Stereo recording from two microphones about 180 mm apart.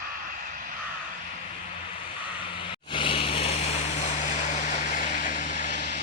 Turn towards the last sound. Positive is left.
turn(degrees=45)  # may be behind; listen again after turning